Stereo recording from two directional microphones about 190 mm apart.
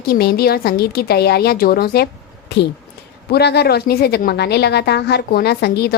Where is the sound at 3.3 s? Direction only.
60° left (ahead or behind).